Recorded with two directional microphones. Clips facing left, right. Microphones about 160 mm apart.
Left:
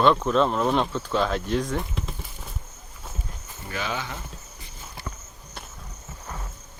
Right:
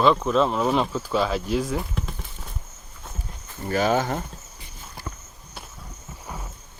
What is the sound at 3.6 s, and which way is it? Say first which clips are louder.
Speech: right 10 dB; 45° right (ahead or behind).